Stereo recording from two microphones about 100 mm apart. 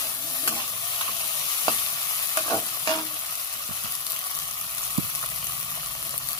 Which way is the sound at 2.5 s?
40° left (ahead or behind).